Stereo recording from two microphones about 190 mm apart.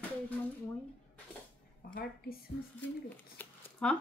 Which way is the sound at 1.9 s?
55° left (ahead or behind).